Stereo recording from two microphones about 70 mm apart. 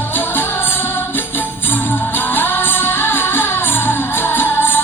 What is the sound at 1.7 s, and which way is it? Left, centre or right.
Music, left.